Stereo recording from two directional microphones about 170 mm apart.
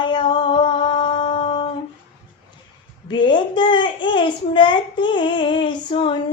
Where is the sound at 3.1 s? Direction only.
30° left (ahead or behind).